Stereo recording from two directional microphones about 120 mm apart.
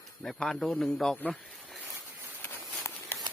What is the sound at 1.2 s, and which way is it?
Snake, 5° left (ahead or behind).